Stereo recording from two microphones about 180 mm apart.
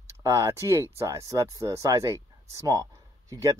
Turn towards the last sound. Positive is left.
turn(degrees=-20)  # may be behind; listen again after turning